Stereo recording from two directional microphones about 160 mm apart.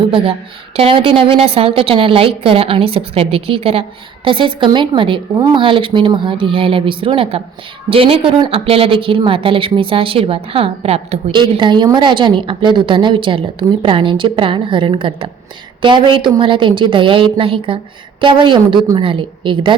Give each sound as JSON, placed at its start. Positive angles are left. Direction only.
{"t": 0.8, "sound": "a woman's voice", "side_deg": -35}